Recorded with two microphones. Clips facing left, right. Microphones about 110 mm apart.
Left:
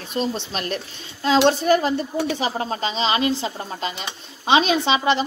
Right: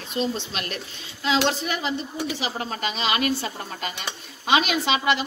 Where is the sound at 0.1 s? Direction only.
40° left (ahead or behind).